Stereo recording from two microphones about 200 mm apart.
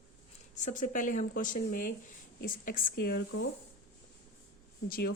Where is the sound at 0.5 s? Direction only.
40° left (ahead or behind).